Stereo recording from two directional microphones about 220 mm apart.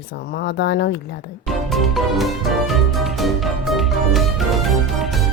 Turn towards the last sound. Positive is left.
turn(degrees=0)  # may be behind; listen again after turning